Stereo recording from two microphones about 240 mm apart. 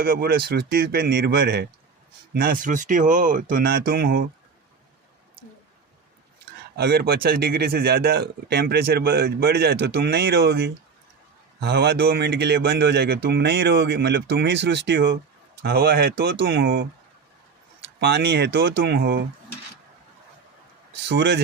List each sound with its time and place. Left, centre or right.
0.0 s speech: right
6.7 s speech: right
18.0 s speech: right
21.1 s speech: right